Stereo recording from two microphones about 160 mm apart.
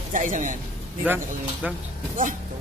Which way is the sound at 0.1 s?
55° right (ahead or behind).